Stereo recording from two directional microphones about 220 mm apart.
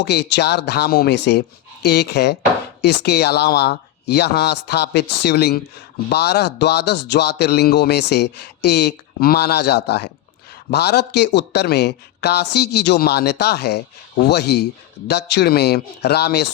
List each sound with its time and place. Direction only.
0.0 s a man's voice: 50° left (ahead or behind)